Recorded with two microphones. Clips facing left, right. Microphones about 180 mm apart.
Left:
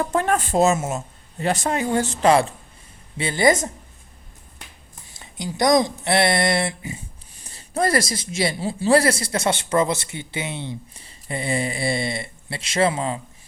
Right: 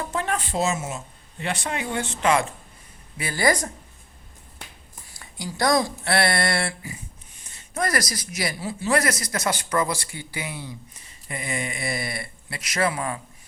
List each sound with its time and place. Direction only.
0.1 s speech: 50° left (ahead or behind)
3.2 s a man's voice: 25° left (ahead or behind)
5.1 s a man's voice: 20° left (ahead or behind)
7.3 s a man's voice: 35° left (ahead or behind)